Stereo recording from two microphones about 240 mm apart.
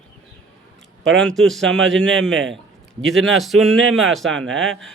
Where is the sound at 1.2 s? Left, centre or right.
Centre.